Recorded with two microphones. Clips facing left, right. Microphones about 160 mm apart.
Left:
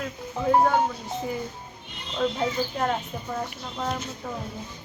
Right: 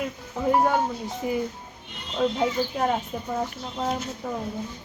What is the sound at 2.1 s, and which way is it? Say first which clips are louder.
Speech: right 2 dB; 10° right (ahead or behind).